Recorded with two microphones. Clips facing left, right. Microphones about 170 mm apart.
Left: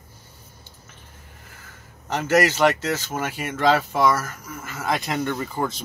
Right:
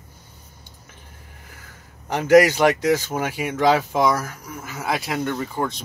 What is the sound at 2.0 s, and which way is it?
Speech, 15° right (ahead or behind).